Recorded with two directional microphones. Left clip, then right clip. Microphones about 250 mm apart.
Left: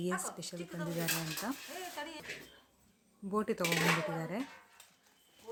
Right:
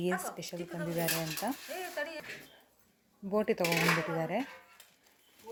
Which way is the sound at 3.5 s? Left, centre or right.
Centre.